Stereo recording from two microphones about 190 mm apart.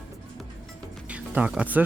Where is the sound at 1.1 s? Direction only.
5° right (ahead or behind).